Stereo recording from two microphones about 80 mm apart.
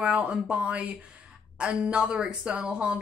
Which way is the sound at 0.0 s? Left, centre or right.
Centre.